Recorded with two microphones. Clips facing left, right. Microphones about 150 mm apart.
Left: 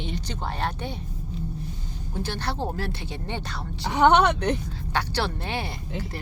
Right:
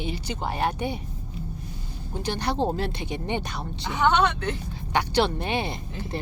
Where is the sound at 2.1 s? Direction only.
15° right (ahead or behind).